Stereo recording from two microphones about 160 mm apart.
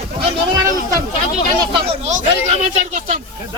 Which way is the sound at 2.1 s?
45° right (ahead or behind).